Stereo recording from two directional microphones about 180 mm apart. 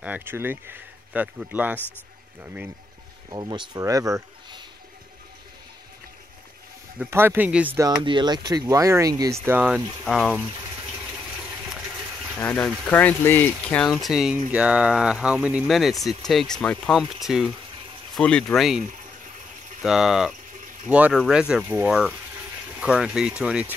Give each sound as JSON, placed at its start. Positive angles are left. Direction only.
{"t": 0.0, "sound": "speech", "side_deg": -10}
{"t": 3.3, "sound": "speech", "side_deg": -25}
{"t": 7.0, "sound": "speech", "side_deg": -10}
{"t": 12.4, "sound": "speech", "side_deg": 5}
{"t": 19.8, "sound": "speech", "side_deg": 0}
{"t": 20.5, "sound": "a sound", "side_deg": -45}
{"t": 20.9, "sound": "speech", "side_deg": -5}